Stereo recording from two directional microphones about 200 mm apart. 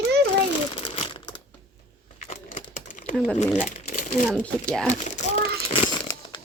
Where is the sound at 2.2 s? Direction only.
40° left (ahead or behind).